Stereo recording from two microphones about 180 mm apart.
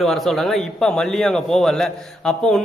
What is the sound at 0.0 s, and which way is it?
A man's voice, centre (ahead or behind).